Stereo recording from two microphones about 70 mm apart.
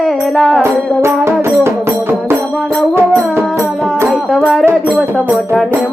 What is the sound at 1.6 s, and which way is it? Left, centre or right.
Music, right.